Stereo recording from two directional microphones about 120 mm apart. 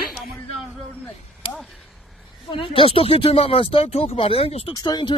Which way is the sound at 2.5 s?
50° left (ahead or behind).